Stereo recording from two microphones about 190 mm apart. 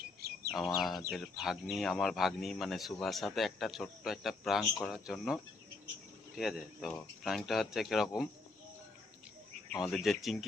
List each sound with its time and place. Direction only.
0.0 s bird: 55° right (ahead or behind)
0.8 s speech: centre (ahead or behind)
9.8 s speech: centre (ahead or behind)